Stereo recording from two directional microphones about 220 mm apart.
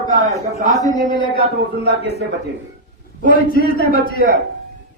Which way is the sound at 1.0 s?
20° left (ahead or behind).